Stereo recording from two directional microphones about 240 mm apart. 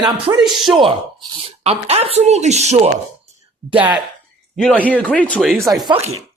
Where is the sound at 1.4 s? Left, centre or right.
Right.